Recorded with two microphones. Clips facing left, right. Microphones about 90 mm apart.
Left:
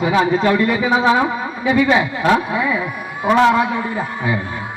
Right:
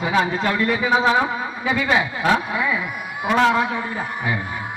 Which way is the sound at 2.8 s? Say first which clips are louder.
Left 4 dB; 35° left (ahead or behind).